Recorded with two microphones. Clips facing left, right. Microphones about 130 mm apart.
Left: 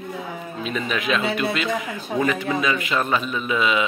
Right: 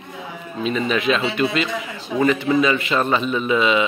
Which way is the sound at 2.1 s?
40° left (ahead or behind).